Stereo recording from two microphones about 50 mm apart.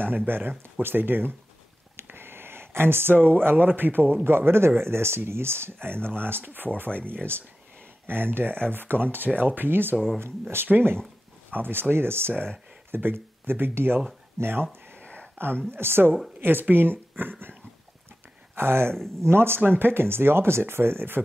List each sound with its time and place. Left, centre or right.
0.3 s speech: right
2.0 s a sound: right
3.4 s speech: right
6.9 s speech: left
8.1 s speech: right
15.0 s a sound: left
15.3 s a woman's voice: right
18.5 s speech: right